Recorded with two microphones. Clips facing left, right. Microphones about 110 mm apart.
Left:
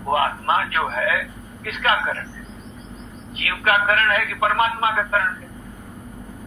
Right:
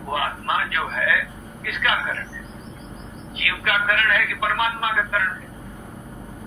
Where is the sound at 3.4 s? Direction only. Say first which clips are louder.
Left 4 dB; 40° left (ahead or behind).